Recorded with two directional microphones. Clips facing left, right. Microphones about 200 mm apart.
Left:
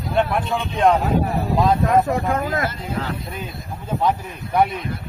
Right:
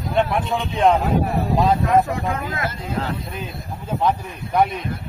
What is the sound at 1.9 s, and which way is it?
Speech, 45° left (ahead or behind).